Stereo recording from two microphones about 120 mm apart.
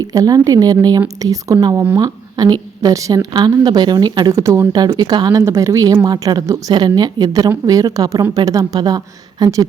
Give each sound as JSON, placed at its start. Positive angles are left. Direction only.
{"t": 0.0, "sound": "speech", "side_deg": -30}
{"t": 4.3, "sound": "a woman's voice", "side_deg": -25}